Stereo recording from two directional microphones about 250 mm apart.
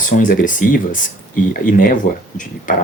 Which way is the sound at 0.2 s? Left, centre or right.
Left.